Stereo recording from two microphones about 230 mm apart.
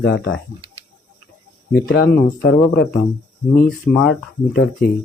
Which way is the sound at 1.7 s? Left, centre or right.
Left.